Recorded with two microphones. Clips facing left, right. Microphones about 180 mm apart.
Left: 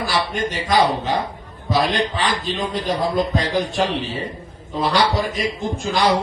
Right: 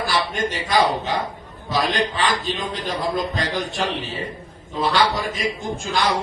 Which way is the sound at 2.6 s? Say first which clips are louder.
Left 4 dB; 45° left (ahead or behind).